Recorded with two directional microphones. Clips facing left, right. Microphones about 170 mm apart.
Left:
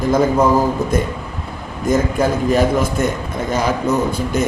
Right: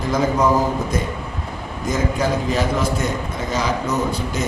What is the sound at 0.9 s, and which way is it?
Mantra, 55° left (ahead or behind).